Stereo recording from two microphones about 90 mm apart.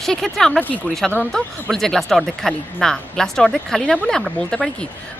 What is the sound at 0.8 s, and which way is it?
Speech, 5° left (ahead or behind).